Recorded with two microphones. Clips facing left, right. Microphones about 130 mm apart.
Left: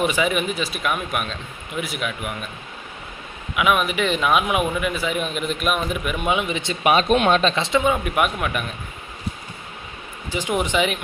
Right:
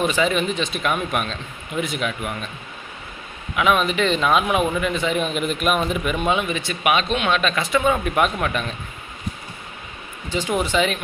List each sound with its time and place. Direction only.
0.0 s a man's voice: 10° left (ahead or behind)
3.5 s a man's voice: 10° left (ahead or behind)
6.2 s speech: 15° left (ahead or behind)
6.9 s speech: 40° left (ahead or behind)
7.5 s a man's voice: 25° left (ahead or behind); by 8.7 s 5° left (ahead or behind)
10.3 s a man's voice: 15° left (ahead or behind)